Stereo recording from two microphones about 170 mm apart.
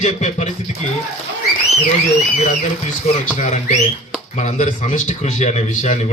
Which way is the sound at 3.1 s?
50° left (ahead or behind).